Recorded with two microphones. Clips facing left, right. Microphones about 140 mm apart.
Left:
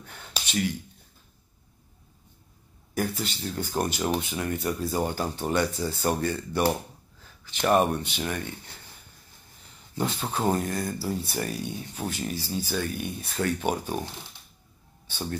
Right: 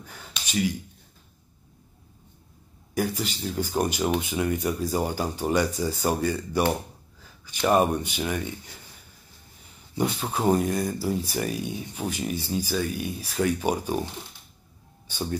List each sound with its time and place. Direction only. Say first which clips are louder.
0.0 s a sound: right 1 dB; 5° right (ahead or behind)
0.5 s speech: right 2 dB; 10° right (ahead or behind)
3.0 s speech: right 2 dB; 10° right (ahead or behind)
9.9 s speech: right 2 dB; 10° right (ahead or behind)
12.6 s speech: right 2 dB; 5° right (ahead or behind)